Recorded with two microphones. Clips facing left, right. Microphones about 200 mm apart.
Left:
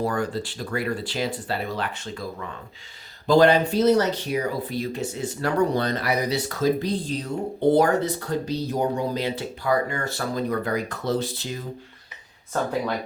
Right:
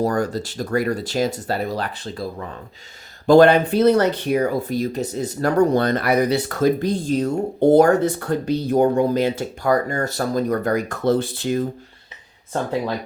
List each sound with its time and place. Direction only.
0.0 s speech: 40° right (ahead or behind)
3.2 s speech: 55° right (ahead or behind)